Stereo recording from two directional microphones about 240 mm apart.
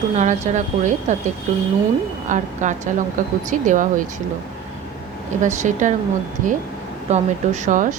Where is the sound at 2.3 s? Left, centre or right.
Right.